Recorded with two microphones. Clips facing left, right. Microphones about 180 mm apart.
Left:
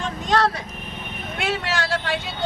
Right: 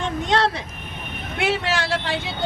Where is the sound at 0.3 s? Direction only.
25° right (ahead or behind).